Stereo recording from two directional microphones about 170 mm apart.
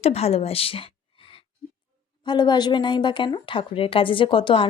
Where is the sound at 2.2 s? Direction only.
25° left (ahead or behind).